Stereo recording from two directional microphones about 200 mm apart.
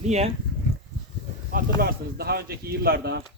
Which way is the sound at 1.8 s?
50° right (ahead or behind).